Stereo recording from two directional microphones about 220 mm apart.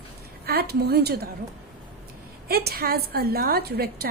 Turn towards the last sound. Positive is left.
turn(degrees=-45)  # may be behind; listen again after turning